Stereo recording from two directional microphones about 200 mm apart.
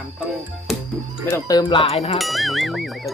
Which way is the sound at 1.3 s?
20° left (ahead or behind).